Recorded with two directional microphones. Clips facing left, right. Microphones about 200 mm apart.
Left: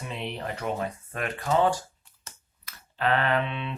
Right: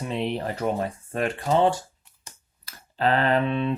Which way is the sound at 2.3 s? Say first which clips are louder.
Even; 15° right (ahead or behind).